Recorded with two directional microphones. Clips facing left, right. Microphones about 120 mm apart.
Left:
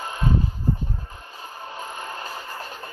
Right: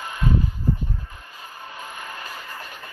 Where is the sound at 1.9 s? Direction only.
30° left (ahead or behind).